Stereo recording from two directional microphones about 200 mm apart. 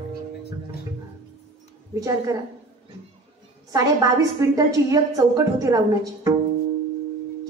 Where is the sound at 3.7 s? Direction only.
15° right (ahead or behind).